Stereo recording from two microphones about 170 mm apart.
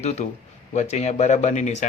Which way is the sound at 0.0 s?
40° left (ahead or behind).